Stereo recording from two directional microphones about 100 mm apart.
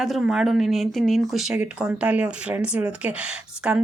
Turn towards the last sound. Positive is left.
turn(degrees=-15)  # may be behind; listen again after turning